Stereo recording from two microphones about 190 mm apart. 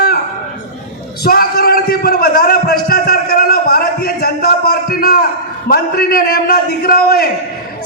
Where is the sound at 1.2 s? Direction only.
55° left (ahead or behind).